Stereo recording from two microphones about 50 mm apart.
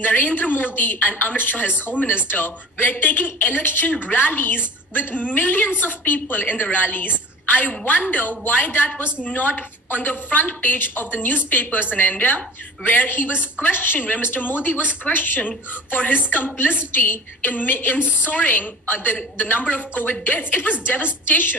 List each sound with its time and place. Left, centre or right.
0.0 s a woman's voice: left